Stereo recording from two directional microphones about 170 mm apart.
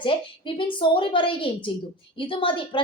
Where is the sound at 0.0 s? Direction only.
30° left (ahead or behind).